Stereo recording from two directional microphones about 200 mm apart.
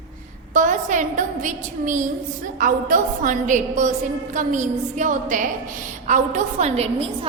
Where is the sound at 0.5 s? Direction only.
40° right (ahead or behind).